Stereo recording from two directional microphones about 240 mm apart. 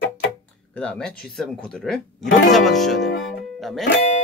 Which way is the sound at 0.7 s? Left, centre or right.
Centre.